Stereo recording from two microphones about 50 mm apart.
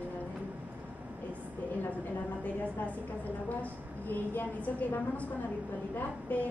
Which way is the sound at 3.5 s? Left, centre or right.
Left.